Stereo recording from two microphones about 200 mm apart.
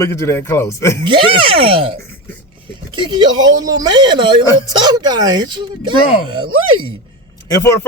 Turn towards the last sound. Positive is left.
turn(degrees=15)  # may be behind; listen again after turning